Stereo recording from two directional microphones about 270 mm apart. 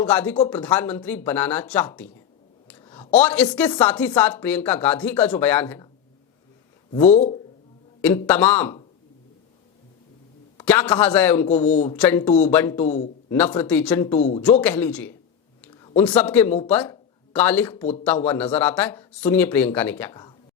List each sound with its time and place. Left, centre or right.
0.0 s speech: centre
2.6 s a sound: centre
3.1 s speech: centre
6.9 s speech: left
8.0 s speech: centre
10.6 s speech: centre
11.4 s speech: left
11.9 s speech: centre
12.8 s speech: left
13.3 s speech: centre
14.2 s speech: left
14.6 s speech: centre